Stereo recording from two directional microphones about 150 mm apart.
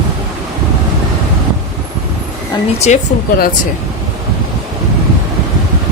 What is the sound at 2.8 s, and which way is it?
Speech, 50° left (ahead or behind).